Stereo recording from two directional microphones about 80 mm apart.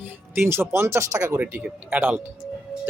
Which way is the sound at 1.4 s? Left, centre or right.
Right.